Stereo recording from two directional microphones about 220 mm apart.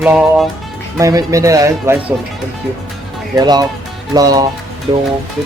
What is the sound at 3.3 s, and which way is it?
Speech, 15° right (ahead or behind).